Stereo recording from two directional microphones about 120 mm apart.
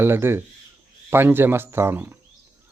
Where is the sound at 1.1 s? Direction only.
20° right (ahead or behind).